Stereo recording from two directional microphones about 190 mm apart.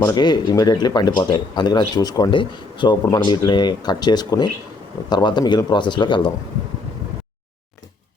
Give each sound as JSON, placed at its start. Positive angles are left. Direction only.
{"t": 0.0, "sound": "speech", "side_deg": 20}